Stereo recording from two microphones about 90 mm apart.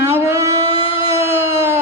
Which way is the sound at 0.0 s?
30° right (ahead or behind).